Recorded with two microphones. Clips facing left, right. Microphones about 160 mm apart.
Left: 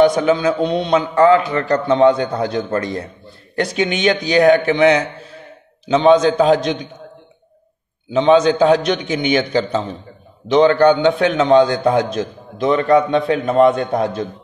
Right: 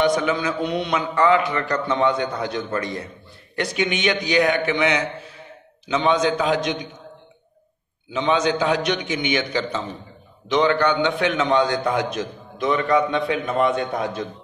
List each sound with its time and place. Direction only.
0.0 s a man's voice: 30° left (ahead or behind)
8.1 s a man's voice: 30° left (ahead or behind)